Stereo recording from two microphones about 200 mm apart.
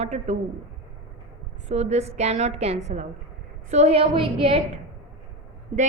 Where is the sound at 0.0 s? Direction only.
35° right (ahead or behind).